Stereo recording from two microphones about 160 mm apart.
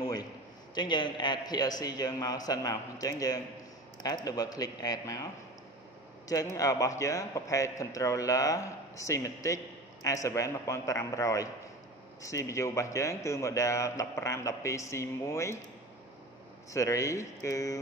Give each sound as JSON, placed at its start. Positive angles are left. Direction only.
{"t": 0.0, "sound": "a sound", "side_deg": 25}
{"t": 0.7, "sound": "a man's voice", "side_deg": 30}
{"t": 6.2, "sound": "a man's voice", "side_deg": 20}
{"t": 16.7, "sound": "a man's voice", "side_deg": 20}